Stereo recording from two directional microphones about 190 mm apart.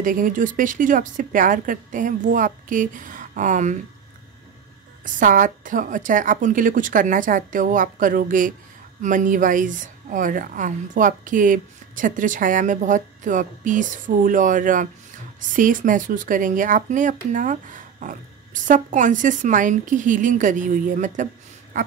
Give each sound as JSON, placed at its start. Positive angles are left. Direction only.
{"t": 0.0, "sound": "a woman's voice", "side_deg": -45}
{"t": 5.0, "sound": "a woman's voice", "side_deg": -45}
{"t": 21.7, "sound": "a sound", "side_deg": -40}